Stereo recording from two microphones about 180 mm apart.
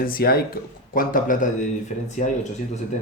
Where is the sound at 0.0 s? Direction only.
55° left (ahead or behind).